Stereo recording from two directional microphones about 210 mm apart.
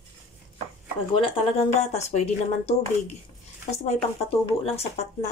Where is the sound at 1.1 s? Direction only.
25° left (ahead or behind).